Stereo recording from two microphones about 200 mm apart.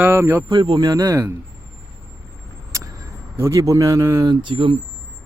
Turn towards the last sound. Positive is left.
turn(degrees=-25)  # may be behind; listen again after turning